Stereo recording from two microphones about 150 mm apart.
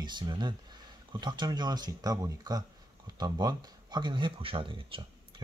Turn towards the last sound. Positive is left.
turn(degrees=-35)  # may be behind; listen again after turning